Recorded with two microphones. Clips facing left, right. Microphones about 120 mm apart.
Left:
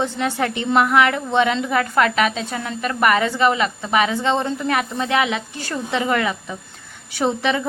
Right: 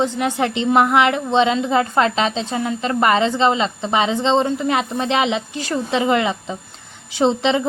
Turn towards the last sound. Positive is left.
turn(degrees=-20)  # may be behind; listen again after turning